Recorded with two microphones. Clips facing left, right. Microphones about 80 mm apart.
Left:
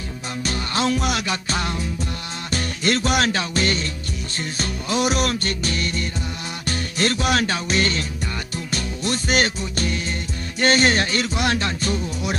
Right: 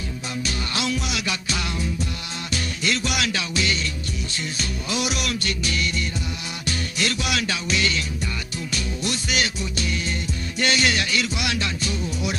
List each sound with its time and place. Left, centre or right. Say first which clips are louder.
0.4 s music: left 5 dB; left